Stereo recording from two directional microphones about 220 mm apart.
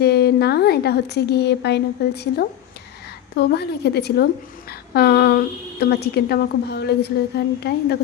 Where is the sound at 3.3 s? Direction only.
50° left (ahead or behind).